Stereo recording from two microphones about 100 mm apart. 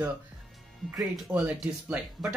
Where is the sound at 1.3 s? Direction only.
20° right (ahead or behind).